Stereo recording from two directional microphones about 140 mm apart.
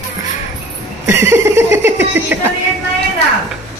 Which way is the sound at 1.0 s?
20° right (ahead or behind).